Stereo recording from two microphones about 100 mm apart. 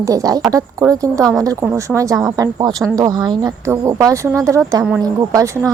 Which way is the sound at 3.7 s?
35° right (ahead or behind).